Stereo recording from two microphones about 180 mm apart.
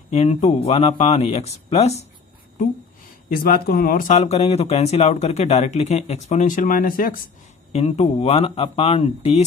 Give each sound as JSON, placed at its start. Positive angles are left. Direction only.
{"t": 0.1, "sound": "speech", "side_deg": 40}
{"t": 3.3, "sound": "speech", "side_deg": 55}
{"t": 7.7, "sound": "speech", "side_deg": 35}